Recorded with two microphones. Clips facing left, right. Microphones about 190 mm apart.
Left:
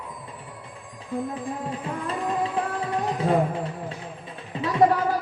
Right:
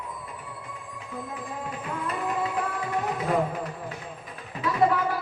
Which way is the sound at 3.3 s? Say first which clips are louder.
Left 4 dB; 30° left (ahead or behind).